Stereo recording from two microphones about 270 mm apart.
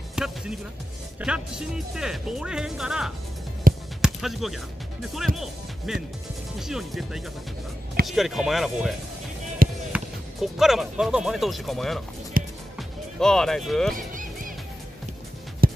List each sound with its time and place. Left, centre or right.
0.1 s music: centre
1.2 s speech: centre
3.7 s music: right
4.0 s music: centre
5.1 s speech: centre
9.6 s basketball bounce: right
9.9 s speech: centre
12.4 s music: right
12.7 s speech: centre
13.9 s music: right
15.6 s music: right